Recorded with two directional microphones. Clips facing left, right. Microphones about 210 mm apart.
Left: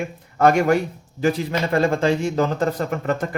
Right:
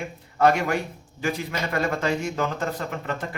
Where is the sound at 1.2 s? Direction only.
35° left (ahead or behind).